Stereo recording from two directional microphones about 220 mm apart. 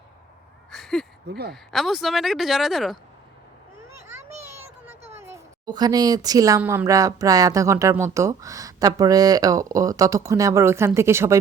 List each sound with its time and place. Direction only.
0.7 s a sound: centre (ahead or behind)
1.3 s speech: 45° right (ahead or behind)
1.7 s speech: centre (ahead or behind)
5.1 s speech: 10° right (ahead or behind)